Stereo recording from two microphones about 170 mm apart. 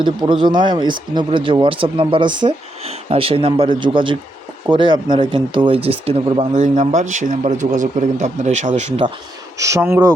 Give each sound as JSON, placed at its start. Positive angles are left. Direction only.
{"t": 0.0, "sound": "speech", "side_deg": -25}
{"t": 9.6, "sound": "speech", "side_deg": -20}